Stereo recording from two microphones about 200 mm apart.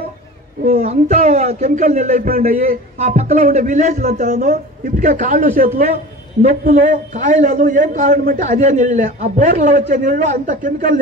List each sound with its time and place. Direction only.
0.7 s a man's voice: 35° right (ahead or behind)